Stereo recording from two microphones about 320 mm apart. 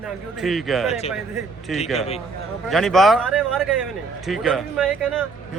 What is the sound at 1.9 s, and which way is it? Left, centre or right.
Speech, centre.